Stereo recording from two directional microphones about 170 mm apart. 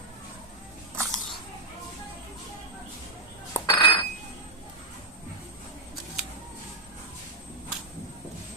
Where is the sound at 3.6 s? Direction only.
25° left (ahead or behind).